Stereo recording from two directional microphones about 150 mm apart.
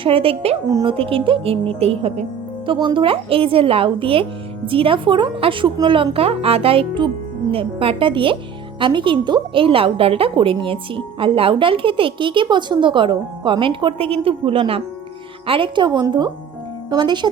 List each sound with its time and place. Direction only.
0.0 s a woman's voice: 40° right (ahead or behind)
0.7 s speech: 25° right (ahead or behind)
0.9 s a woman's voice: 35° right (ahead or behind)